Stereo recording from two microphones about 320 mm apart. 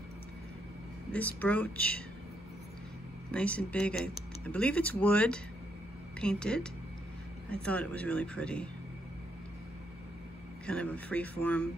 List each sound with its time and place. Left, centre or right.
1.1 s speech: centre
3.3 s speech: centre
10.7 s speech: centre